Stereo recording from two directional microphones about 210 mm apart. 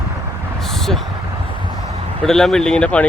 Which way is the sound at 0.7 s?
Centre (ahead or behind).